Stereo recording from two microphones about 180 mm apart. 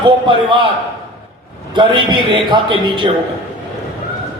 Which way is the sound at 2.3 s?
25° right (ahead or behind).